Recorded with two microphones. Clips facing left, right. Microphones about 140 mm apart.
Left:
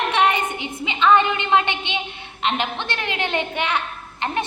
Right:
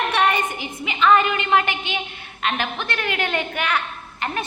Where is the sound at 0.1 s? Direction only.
20° left (ahead or behind).